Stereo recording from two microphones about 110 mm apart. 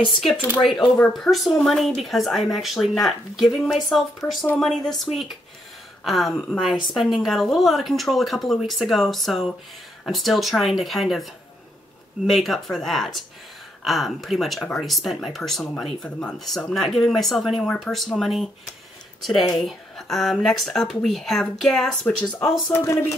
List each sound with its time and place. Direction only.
0.6 s speech: centre (ahead or behind)
12.3 s speech: centre (ahead or behind)
22.7 s speech: 25° left (ahead or behind)